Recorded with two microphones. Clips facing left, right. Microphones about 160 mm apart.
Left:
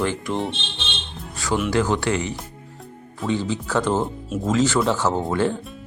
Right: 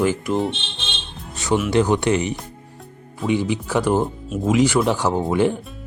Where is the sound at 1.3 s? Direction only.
20° right (ahead or behind).